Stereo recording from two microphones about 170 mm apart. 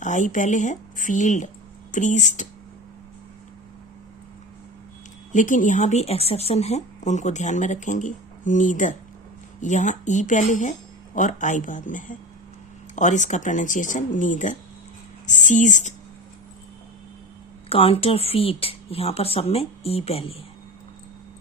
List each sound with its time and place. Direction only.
0.0 s speech: 45° left (ahead or behind)
5.3 s speech: 50° left (ahead or behind)
17.7 s speech: 35° left (ahead or behind)